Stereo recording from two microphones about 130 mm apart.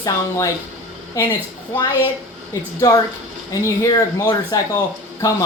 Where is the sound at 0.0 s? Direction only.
25° left (ahead or behind).